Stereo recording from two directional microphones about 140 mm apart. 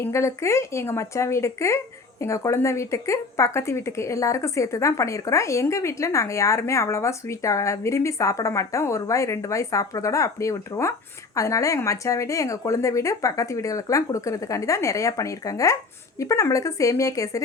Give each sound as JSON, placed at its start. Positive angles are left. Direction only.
{"t": 0.0, "sound": "speech", "side_deg": 20}